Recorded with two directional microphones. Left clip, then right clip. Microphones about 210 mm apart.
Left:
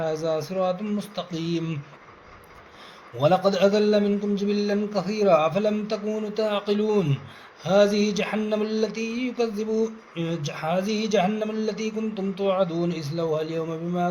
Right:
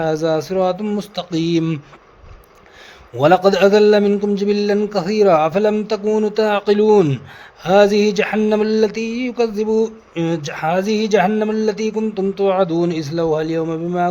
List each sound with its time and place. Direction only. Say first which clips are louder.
0.0 s mantra: right 8 dB; 55° right (ahead or behind)
3.2 s mantra: right 8 dB; 50° right (ahead or behind)